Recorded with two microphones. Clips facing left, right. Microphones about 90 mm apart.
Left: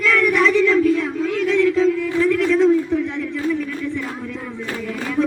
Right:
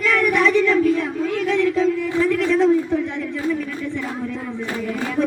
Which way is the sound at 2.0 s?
20° right (ahead or behind).